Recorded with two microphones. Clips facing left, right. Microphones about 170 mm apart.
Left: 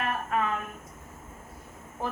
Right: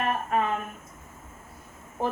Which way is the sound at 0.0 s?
25° right (ahead or behind).